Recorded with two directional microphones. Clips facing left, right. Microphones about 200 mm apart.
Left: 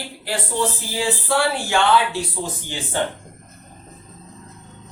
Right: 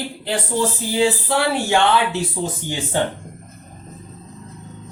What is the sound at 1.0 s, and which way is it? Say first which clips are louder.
Speech: right 2 dB; 20° right (ahead or behind).